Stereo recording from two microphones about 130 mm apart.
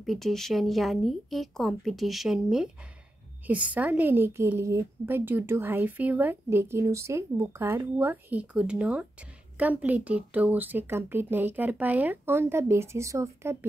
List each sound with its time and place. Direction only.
0.0 s a woman's voice: centre (ahead or behind); by 13.7 s 20° right (ahead or behind)